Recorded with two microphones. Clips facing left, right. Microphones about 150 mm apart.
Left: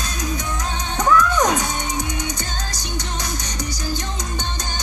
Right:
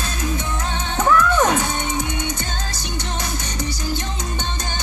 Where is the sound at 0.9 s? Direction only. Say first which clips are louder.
Right 1 dB; 25° right (ahead or behind).